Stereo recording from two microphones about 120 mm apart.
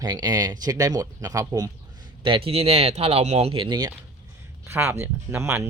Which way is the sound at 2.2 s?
50° right (ahead or behind).